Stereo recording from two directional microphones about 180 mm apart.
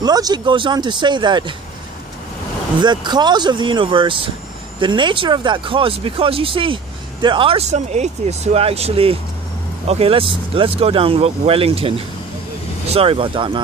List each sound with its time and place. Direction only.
0.0 s speech: 20° right (ahead or behind)
2.8 s speech: 25° right (ahead or behind)